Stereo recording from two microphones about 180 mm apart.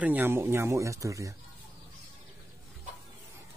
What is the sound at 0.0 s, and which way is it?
Speech, 10° right (ahead or behind).